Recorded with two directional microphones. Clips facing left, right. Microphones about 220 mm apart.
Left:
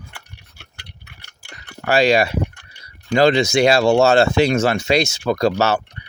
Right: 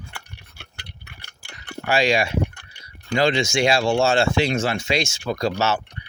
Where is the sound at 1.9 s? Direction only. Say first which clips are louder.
Left 5 dB; 35° left (ahead or behind).